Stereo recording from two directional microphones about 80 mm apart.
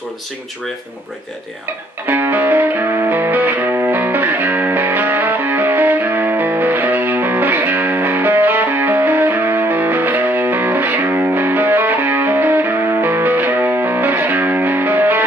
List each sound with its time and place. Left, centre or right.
2.0 s music: right